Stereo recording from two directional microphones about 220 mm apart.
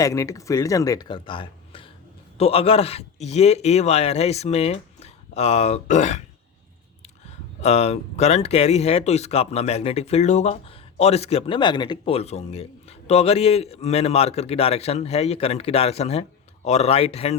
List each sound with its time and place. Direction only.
0.0 s speech: 15° left (ahead or behind); by 6.2 s 30° left (ahead or behind)
7.6 s speech: 30° left (ahead or behind)